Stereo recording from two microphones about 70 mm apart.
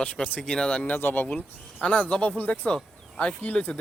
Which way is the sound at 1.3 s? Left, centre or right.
Centre.